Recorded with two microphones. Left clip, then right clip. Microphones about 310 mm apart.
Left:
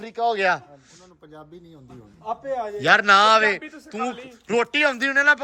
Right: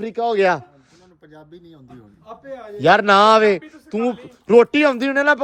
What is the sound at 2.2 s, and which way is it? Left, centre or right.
Speech, left.